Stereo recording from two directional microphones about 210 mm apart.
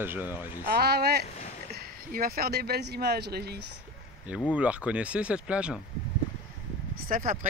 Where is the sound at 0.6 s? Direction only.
50° right (ahead or behind).